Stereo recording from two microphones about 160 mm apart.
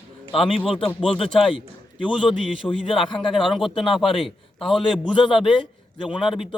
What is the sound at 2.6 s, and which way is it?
Speech, 35° left (ahead or behind).